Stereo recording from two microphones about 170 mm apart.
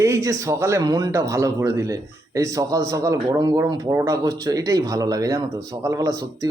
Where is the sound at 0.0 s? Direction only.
20° right (ahead or behind).